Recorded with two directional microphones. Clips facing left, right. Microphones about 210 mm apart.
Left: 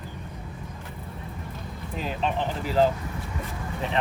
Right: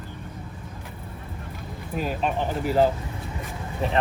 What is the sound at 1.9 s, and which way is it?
Speech, 5° right (ahead or behind).